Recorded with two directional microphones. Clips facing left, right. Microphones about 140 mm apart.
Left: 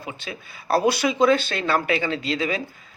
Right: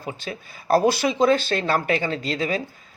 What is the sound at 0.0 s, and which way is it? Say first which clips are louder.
Speech: right 2 dB; 40° right (ahead or behind).